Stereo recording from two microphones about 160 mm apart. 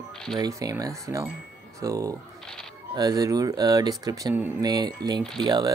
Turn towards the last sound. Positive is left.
turn(degrees=-25)  # may be behind; listen again after turning